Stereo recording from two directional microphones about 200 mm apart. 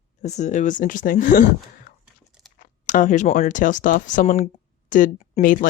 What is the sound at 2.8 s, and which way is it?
Speech, 40° left (ahead or behind).